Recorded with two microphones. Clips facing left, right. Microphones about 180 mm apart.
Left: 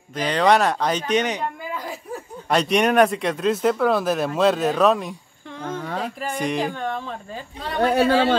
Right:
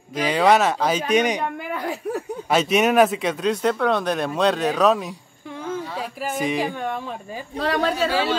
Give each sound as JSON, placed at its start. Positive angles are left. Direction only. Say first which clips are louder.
{"t": 0.1, "sound": "speech", "louder": "right 1 dB", "side_deg": -10}
{"t": 1.6, "sound": "a sound", "louder": "right 4 dB", "side_deg": -70}
{"t": 2.5, "sound": "speech", "louder": "even", "side_deg": -5}
{"t": 6.2, "sound": "speech", "louder": "right 2 dB", "side_deg": 0}
{"t": 7.5, "sound": "a woman's voice", "louder": "right 6 dB", "side_deg": -80}
{"t": 7.8, "sound": "speech", "louder": "left 7 dB", "side_deg": 60}